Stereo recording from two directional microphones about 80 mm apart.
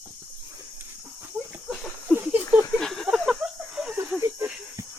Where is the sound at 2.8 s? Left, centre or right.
Centre.